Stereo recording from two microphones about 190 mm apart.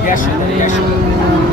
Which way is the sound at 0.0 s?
45° left (ahead or behind).